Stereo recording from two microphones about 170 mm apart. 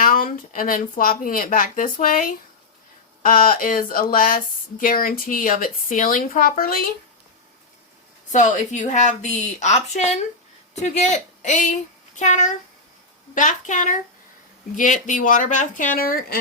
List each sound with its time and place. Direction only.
0.0 s speech: 55° left (ahead or behind)
8.3 s a woman's voice: 45° left (ahead or behind)